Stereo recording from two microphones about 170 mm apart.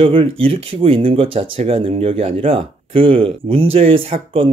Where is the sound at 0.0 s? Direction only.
30° right (ahead or behind).